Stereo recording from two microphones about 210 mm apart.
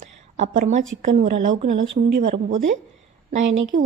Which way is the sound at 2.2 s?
35° right (ahead or behind).